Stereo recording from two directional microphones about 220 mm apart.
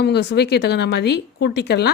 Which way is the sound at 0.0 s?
50° left (ahead or behind).